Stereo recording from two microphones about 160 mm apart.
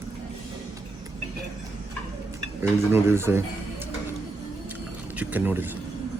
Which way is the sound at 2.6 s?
15° right (ahead or behind).